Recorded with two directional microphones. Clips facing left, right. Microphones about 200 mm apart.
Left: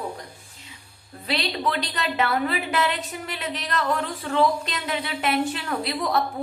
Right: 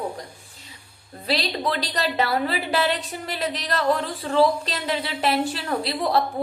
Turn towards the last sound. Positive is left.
turn(degrees=-30)  # may be behind; listen again after turning